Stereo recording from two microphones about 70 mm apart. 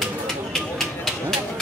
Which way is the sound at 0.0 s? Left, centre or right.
Centre.